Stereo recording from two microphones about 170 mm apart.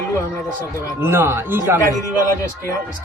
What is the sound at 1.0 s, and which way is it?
Speech, 15° right (ahead or behind).